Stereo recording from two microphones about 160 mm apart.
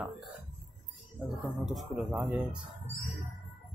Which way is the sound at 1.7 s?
5° right (ahead or behind).